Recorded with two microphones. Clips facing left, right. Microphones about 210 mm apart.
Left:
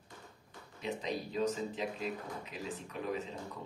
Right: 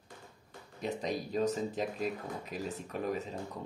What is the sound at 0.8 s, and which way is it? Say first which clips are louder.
Speech: right 3 dB; 45° right (ahead or behind).